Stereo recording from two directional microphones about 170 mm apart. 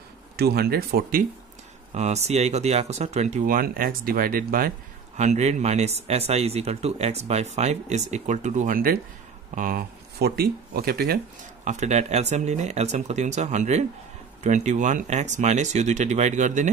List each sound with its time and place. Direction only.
0.4 s speech: 65° right (ahead or behind)
2.0 s speech: 40° right (ahead or behind); by 4.7 s 60° right (ahead or behind)
5.1 s speech: 45° right (ahead or behind); by 11.1 s 60° right (ahead or behind)
11.6 s speech: 45° right (ahead or behind)